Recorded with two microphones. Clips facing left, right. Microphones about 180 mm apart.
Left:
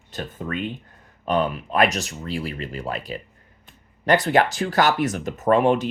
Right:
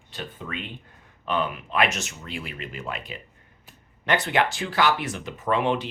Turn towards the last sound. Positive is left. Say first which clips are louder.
# left 6 dB
turn(degrees=45)  # may be behind; listen again after turning